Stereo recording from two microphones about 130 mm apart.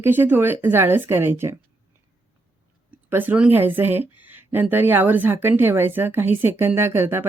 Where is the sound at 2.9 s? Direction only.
15° right (ahead or behind).